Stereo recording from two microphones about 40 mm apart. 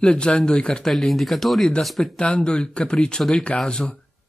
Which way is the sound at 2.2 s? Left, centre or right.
Left.